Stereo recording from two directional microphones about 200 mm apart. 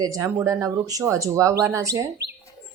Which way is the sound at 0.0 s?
15° right (ahead or behind).